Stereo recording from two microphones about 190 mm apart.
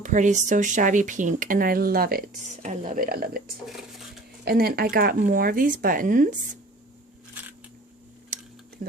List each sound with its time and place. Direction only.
0.0 s speech: 40° right (ahead or behind)
8.3 s a sound: 45° right (ahead or behind)
8.8 s speech: 50° right (ahead or behind)